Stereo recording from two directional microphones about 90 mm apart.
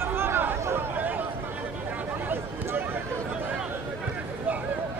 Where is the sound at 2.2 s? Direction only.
20° right (ahead or behind).